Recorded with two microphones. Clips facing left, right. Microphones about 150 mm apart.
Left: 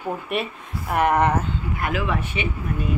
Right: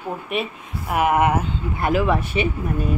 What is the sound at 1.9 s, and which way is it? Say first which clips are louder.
Speech: right 8 dB; 40° right (ahead or behind).